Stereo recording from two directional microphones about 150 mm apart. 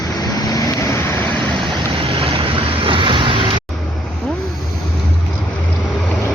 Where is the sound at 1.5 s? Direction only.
30° right (ahead or behind).